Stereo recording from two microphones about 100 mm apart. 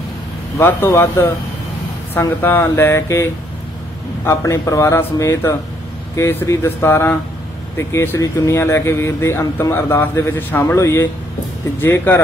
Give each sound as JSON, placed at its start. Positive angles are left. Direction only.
{"t": 0.6, "sound": "speech", "side_deg": 25}